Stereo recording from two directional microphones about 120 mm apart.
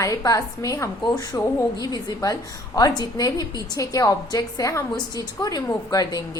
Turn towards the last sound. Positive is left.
turn(degrees=30)  # may be behind; listen again after turning